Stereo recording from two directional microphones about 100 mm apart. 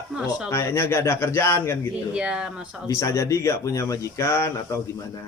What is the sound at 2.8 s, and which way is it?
Speech, 30° left (ahead or behind).